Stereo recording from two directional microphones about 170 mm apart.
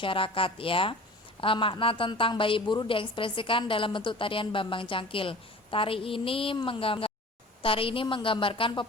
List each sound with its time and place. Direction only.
0.0 s a woman's voice: 30° left (ahead or behind)